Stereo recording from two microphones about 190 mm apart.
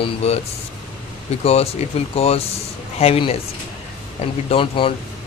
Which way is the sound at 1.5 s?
30° left (ahead or behind).